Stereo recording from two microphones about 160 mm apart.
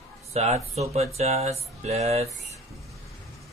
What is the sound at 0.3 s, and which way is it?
Speech, 40° right (ahead or behind).